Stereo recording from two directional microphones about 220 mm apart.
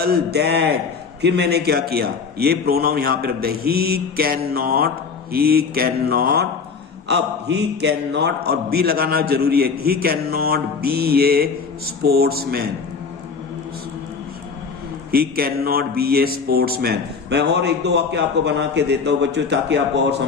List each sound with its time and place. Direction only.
0.0 s speech: 45° right (ahead or behind)
15.1 s speech: 45° right (ahead or behind)